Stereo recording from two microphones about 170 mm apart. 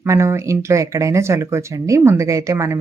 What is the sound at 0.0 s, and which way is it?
Speech, 15° right (ahead or behind).